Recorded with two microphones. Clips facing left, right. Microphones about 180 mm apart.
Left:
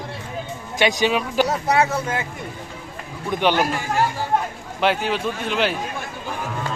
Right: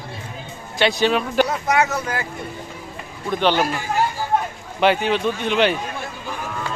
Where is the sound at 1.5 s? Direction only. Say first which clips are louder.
Left 1 dB; 35° left (ahead or behind).